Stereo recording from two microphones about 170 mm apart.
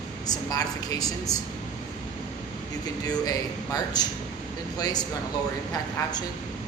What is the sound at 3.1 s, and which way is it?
Speech, 25° left (ahead or behind).